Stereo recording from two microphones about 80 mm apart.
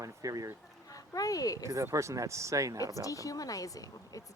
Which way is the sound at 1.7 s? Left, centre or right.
Right.